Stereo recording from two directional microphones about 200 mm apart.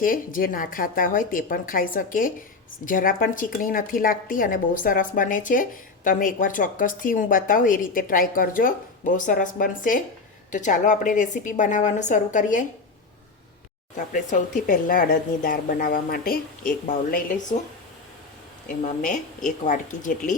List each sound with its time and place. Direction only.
0.0 s a woman's voice: 45° left (ahead or behind)
13.9 s speech: 40° left (ahead or behind)
18.7 s a woman's voice: 40° left (ahead or behind)